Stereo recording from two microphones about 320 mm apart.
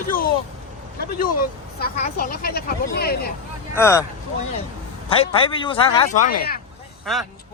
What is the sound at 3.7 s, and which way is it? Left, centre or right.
Speech, centre.